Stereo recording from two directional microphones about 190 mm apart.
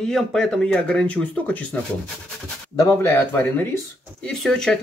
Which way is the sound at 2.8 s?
10° left (ahead or behind).